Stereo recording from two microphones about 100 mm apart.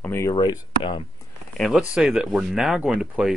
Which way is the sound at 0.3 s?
45° left (ahead or behind).